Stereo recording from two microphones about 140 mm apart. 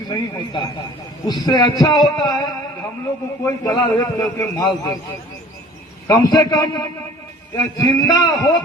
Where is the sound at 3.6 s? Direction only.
25° left (ahead or behind).